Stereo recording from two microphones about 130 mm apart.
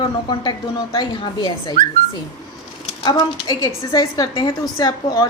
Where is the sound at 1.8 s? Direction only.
90° right.